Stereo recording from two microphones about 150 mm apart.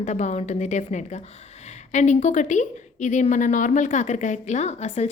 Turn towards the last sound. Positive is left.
turn(degrees=50)  # may be behind; listen again after turning